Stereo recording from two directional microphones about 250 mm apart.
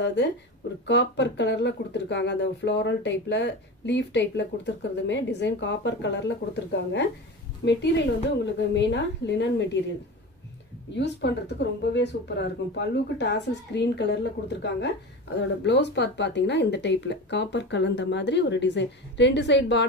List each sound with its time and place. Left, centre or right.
0.0 s speech: left
11.0 s speech: left